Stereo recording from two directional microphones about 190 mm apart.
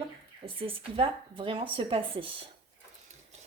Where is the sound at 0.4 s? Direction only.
30° right (ahead or behind).